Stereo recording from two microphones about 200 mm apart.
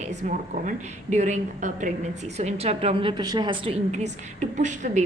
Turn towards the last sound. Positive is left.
turn(degrees=-35)  # may be behind; listen again after turning